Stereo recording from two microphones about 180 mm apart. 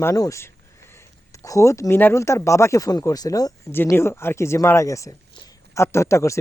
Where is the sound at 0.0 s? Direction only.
15° left (ahead or behind).